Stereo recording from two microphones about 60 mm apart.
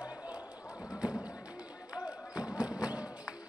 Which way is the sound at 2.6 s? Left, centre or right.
Centre.